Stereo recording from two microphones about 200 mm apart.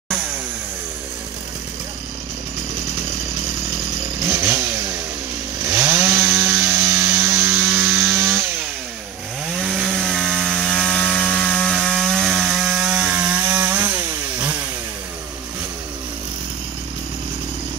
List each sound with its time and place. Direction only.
5.7 s chainsaw: 15° right (ahead or behind)
9.7 s chainsaw: centre (ahead or behind)